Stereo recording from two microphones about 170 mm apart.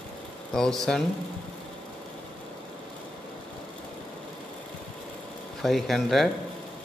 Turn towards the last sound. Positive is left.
turn(degrees=0)  # may be behind; listen again after turning